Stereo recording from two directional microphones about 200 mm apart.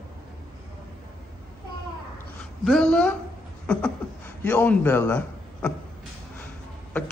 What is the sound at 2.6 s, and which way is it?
Speech, 5° left (ahead or behind).